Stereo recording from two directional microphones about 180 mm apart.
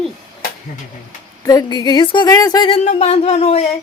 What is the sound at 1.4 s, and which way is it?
Speech, 20° left (ahead or behind).